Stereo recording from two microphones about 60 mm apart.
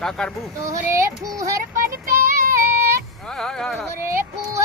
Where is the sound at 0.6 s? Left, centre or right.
Right.